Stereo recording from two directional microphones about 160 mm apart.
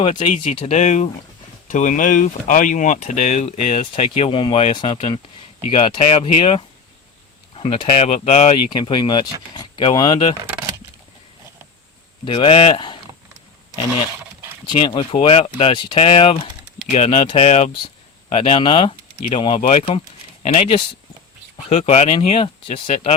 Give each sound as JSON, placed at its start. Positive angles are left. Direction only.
{"t": 0.0, "sound": "speech", "side_deg": 35}
{"t": 8.7, "sound": "speech", "side_deg": 25}
{"t": 12.2, "sound": "speech", "side_deg": 35}
{"t": 14.8, "sound": "speech", "side_deg": 30}